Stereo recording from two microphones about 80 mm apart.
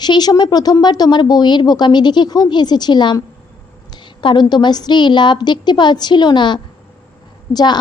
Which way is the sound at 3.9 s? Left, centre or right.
Left.